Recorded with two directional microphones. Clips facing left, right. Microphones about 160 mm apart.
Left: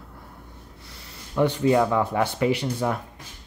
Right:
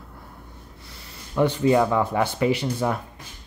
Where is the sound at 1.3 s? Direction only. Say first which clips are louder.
Right 1 dB; 5° right (ahead or behind).